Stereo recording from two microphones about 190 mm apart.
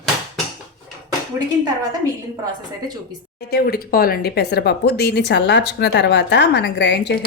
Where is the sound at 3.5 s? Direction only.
55° left (ahead or behind).